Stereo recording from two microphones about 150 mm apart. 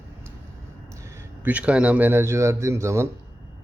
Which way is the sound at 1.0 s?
10° right (ahead or behind).